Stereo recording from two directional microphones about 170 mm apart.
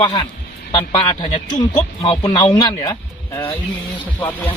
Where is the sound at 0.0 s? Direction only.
30° left (ahead or behind).